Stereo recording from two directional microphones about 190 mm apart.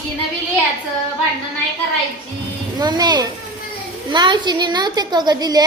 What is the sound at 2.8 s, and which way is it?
A child's voice, 20° right (ahead or behind).